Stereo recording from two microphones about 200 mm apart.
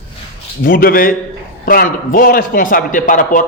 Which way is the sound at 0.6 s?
45° left (ahead or behind).